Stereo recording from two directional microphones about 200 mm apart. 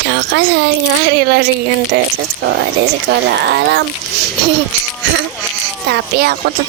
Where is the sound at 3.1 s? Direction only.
60° right (ahead or behind).